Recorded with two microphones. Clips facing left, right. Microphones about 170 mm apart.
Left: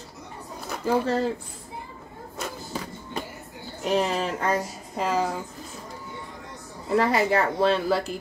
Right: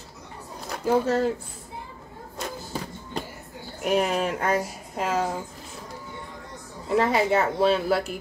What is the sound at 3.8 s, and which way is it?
A woman's voice, 10° right (ahead or behind).